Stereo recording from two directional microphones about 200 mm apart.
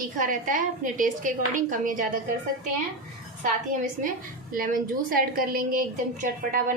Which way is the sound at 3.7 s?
40° right (ahead or behind).